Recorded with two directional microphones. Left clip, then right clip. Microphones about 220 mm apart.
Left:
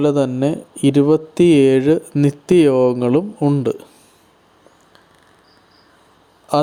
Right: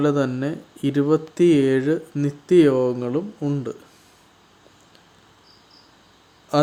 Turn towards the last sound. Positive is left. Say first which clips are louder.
# left 3 dB
turn(degrees=25)  # may be behind; listen again after turning